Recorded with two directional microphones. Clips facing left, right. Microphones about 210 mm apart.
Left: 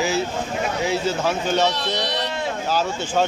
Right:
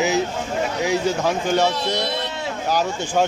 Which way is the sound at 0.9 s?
15° right (ahead or behind).